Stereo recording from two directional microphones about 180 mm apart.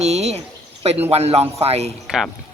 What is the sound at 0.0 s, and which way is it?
Speech, 35° right (ahead or behind).